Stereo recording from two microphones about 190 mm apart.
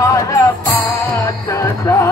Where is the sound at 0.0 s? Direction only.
15° left (ahead or behind).